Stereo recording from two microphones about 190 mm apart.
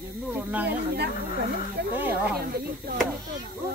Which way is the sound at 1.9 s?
10° right (ahead or behind).